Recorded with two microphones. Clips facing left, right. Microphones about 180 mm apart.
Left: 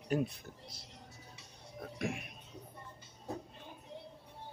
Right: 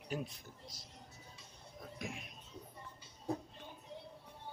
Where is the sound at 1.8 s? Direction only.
65° left (ahead or behind).